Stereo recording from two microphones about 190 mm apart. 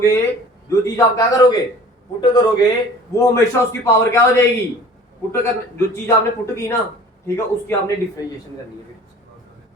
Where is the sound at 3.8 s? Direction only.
15° left (ahead or behind).